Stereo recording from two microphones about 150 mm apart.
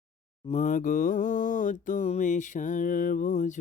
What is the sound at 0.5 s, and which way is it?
Mantra, 55° left (ahead or behind).